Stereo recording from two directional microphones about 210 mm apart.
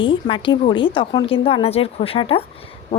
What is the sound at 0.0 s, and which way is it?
Speech, 25° left (ahead or behind).